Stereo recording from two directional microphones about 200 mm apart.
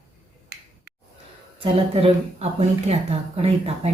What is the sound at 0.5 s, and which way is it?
Finger snapping, 60° right (ahead or behind).